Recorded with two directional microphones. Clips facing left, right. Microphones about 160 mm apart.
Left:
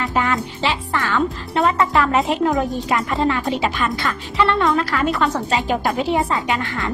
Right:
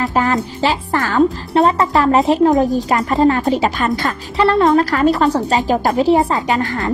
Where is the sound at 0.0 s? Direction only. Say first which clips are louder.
Right 4 dB; 40° right (ahead or behind).